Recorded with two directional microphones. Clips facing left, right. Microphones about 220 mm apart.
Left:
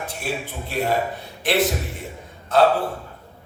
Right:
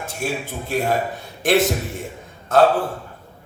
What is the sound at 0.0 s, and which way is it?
A man's voice, 45° right (ahead or behind).